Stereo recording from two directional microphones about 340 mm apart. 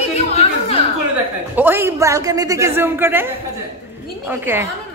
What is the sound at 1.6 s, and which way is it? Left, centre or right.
A woman's voice, centre.